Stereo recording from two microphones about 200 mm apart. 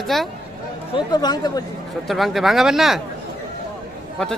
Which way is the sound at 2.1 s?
Centre (ahead or behind).